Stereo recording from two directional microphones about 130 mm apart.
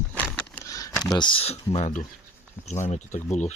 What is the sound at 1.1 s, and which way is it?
Speech, 40° left (ahead or behind).